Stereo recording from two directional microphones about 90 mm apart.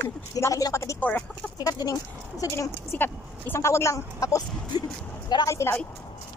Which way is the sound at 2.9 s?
25° left (ahead or behind).